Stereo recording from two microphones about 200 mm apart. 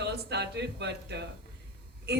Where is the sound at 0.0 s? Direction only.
60° right (ahead or behind).